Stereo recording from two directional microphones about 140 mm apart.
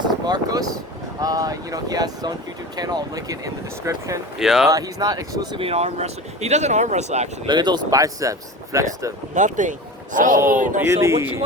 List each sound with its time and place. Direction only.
0.0 s speech: 30° right (ahead or behind)
4.4 s speech: 5° right (ahead or behind)
4.7 s speech: 25° right (ahead or behind)
5.5 s speech: 45° right (ahead or behind)
7.4 s speech: 30° right (ahead or behind)
9.3 s speech: 60° right (ahead or behind)
10.8 s speech: 20° right (ahead or behind)